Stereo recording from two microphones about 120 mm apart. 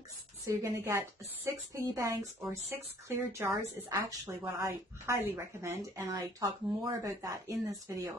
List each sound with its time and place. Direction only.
0.5 s a woman's voice: 25° right (ahead or behind)